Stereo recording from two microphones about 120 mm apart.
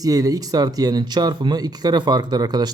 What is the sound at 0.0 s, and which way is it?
A man's voice, 30° right (ahead or behind).